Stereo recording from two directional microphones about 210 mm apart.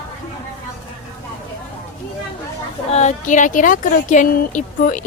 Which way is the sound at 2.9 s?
35° left (ahead or behind).